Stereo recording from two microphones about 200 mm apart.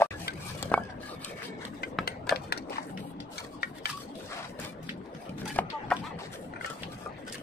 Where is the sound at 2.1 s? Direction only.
50° left (ahead or behind).